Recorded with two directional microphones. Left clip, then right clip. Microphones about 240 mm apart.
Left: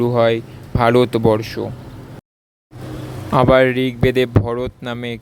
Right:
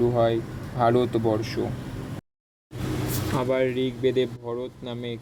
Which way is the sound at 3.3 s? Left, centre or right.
Left.